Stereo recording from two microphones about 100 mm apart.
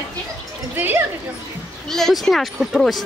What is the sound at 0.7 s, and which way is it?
Speech, 20° right (ahead or behind).